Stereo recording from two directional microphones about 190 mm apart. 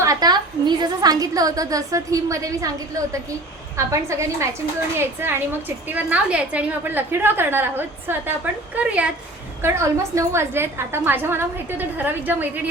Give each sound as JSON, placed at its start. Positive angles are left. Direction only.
{"t": 0.0, "sound": "a woman's voice", "side_deg": -20}